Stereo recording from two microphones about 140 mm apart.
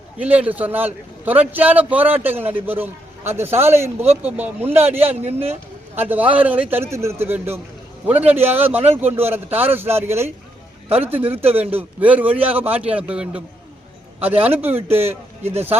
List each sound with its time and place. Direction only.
0.2 s a man's voice: 10° right (ahead or behind)
5.1 s speech: 55° right (ahead or behind)
6.0 s a man's voice: 10° right (ahead or behind)